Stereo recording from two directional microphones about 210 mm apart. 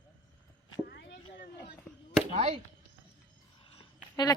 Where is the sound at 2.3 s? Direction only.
30° right (ahead or behind).